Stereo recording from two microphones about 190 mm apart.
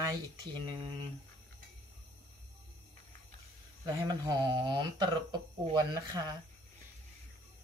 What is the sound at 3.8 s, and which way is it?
Speech, 20° right (ahead or behind).